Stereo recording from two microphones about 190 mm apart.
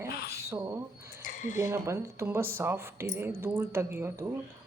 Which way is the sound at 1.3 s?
40° left (ahead or behind).